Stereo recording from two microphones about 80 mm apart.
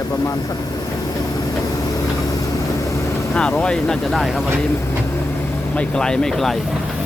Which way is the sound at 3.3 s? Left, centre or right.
Centre.